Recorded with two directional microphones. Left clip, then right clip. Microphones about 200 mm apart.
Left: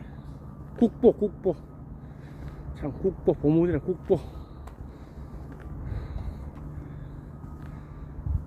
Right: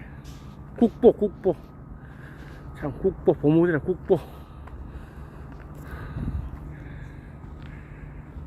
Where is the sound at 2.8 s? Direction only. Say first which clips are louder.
Right 3 dB; 10° right (ahead or behind).